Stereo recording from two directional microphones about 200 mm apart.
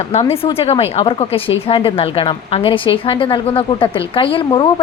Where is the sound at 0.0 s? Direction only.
30° left (ahead or behind).